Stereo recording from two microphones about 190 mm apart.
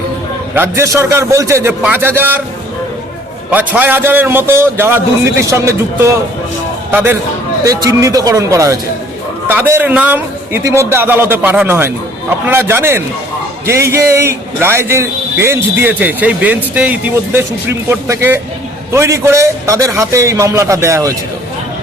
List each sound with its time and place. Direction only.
0.5 s a man's voice: 10° right (ahead or behind)
3.5 s a man's voice: 10° right (ahead or behind)